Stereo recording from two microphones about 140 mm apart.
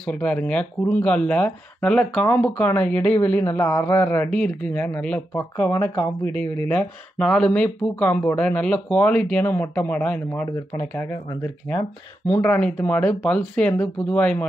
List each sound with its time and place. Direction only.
0.0 s speech: 10° left (ahead or behind)
6.7 s speech: 5° left (ahead or behind)